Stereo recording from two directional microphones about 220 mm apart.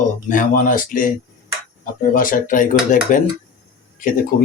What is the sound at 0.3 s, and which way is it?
Speech, 40° left (ahead or behind).